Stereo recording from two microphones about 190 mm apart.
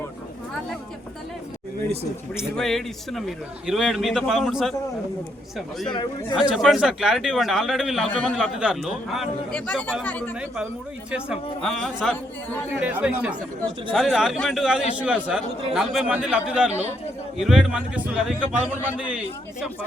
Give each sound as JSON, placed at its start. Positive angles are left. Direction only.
{"t": 2.6, "sound": "a man's voice", "side_deg": 0}
{"t": 5.9, "sound": "speech", "side_deg": 25}
{"t": 6.5, "sound": "a man's voice", "side_deg": 0}
{"t": 10.3, "sound": "a man's voice", "side_deg": -5}